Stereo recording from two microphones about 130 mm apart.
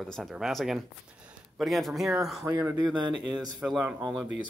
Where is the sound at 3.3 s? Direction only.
5° right (ahead or behind).